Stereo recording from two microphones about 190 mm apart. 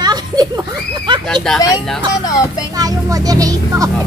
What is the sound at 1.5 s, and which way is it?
Speech, 20° left (ahead or behind).